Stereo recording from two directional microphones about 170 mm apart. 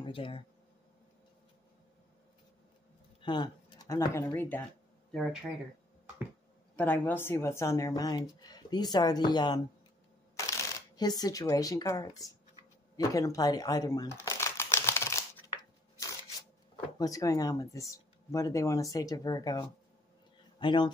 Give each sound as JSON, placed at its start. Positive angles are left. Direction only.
{"t": 0.0, "sound": "speech", "side_deg": 30}
{"t": 3.2, "sound": "speech", "side_deg": 25}
{"t": 5.1, "sound": "speech", "side_deg": 0}
{"t": 6.8, "sound": "speech", "side_deg": 10}
{"t": 11.0, "sound": "speech", "side_deg": 25}
{"t": 12.9, "sound": "a sound", "side_deg": 20}
{"t": 16.7, "sound": "speech", "side_deg": 20}